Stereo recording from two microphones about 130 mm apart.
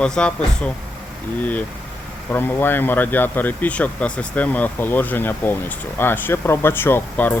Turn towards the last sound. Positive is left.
turn(degrees=15)  # may be behind; listen again after turning